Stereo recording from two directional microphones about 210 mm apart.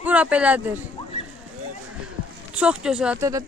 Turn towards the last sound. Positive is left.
turn(degrees=-15)  # may be behind; listen again after turning